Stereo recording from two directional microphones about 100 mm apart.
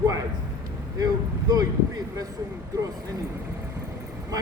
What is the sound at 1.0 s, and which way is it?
A man's voice, 40° right (ahead or behind).